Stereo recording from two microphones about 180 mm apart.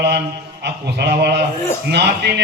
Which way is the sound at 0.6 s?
70° right (ahead or behind).